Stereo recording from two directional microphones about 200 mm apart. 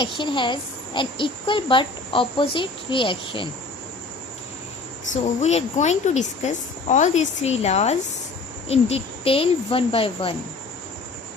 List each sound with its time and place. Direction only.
0.0 s a woman's voice: 25° left (ahead or behind)
5.1 s a woman's voice: 35° left (ahead or behind)